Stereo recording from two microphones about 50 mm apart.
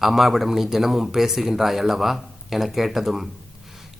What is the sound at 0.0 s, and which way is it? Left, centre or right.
Speech, centre.